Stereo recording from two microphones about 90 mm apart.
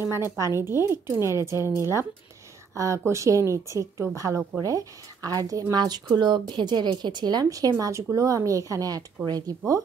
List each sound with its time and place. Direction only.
0.1 s a woman's voice: 30° right (ahead or behind)